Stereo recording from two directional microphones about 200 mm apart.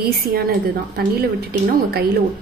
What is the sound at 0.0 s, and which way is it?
A woman's voice, 50° right (ahead or behind).